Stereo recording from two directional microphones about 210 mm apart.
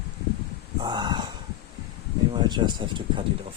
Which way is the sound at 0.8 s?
20° right (ahead or behind).